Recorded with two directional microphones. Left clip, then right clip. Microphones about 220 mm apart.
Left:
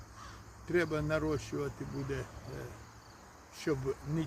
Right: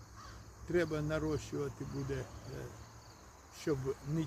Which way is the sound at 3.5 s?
10° left (ahead or behind).